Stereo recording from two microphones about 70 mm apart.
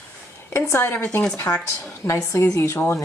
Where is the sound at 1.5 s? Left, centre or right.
Centre.